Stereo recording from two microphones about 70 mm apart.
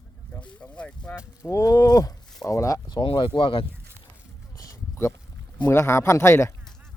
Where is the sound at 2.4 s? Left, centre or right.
Left.